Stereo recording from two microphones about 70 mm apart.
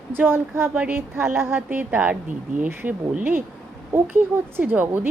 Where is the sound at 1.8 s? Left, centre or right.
Right.